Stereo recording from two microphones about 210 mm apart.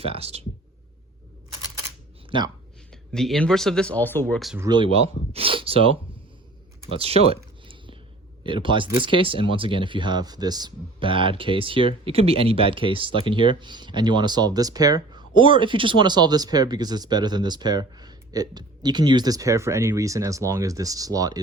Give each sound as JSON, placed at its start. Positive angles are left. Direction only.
{"t": 0.0, "sound": "speech", "side_deg": -30}
{"t": 2.3, "sound": "speech", "side_deg": -25}
{"t": 2.9, "sound": "speech", "side_deg": 0}
{"t": 4.5, "sound": "speech", "side_deg": -15}
{"t": 6.9, "sound": "speech", "side_deg": -30}
{"t": 7.6, "sound": "a sound", "side_deg": -25}
{"t": 8.4, "sound": "speech", "side_deg": -25}